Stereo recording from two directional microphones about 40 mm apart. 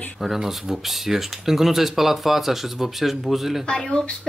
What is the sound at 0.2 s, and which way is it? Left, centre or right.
Speech, centre.